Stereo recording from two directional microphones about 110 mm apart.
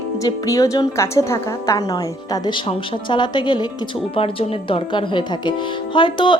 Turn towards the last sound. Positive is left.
turn(degrees=50)  # may be behind; listen again after turning